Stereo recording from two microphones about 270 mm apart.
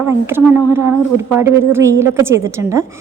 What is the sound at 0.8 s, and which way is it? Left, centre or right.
Speech, right.